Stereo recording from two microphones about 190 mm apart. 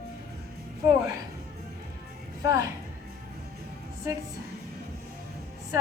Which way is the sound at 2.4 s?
15° right (ahead or behind).